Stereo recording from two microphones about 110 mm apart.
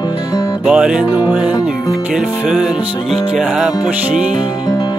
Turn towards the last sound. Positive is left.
turn(degrees=-5)  # may be behind; listen again after turning